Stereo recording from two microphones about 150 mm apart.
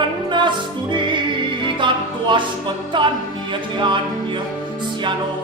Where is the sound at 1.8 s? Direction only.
30° right (ahead or behind).